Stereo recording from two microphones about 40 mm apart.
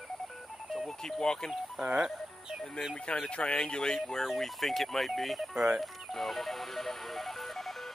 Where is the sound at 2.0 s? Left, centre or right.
Centre.